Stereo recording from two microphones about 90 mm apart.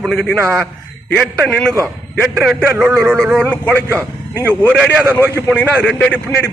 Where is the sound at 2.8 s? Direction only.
25° right (ahead or behind).